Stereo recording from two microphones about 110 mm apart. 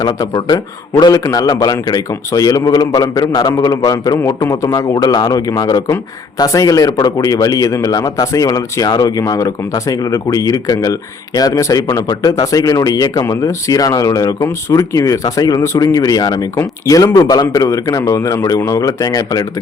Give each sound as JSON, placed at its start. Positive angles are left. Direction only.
{"t": 0.0, "sound": "a man's voice", "side_deg": 35}
{"t": 4.9, "sound": "a man's voice", "side_deg": 45}
{"t": 5.2, "sound": "a man's voice", "side_deg": 35}